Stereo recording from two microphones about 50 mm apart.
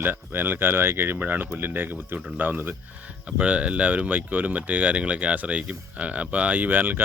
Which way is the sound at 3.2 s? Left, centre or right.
Right.